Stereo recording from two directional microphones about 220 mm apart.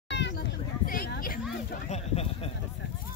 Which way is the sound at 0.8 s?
40° left (ahead or behind).